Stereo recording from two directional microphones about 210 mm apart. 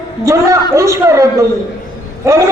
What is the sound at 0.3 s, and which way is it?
A woman's voice, 15° right (ahead or behind).